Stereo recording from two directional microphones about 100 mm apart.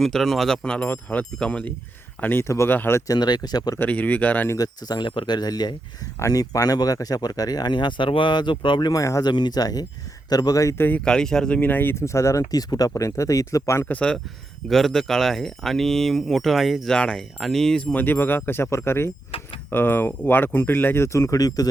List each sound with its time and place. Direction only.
0.0 s speech: centre (ahead or behind)
2.2 s speech: 25° left (ahead or behind)
3.1 s speech: 45° left (ahead or behind)
3.8 s speech: 15° left (ahead or behind)
4.5 s speech: 40° left (ahead or behind)
8.9 s speech: 35° left (ahead or behind)
10.8 s speech: 15° left (ahead or behind)
13.9 s speech: 10° left (ahead or behind)
17.9 s speech: 20° left (ahead or behind)
19.3 s keys jangling: 70° left (ahead or behind)
19.7 s speech: 20° left (ahead or behind); by 21.7 s 40° left (ahead or behind)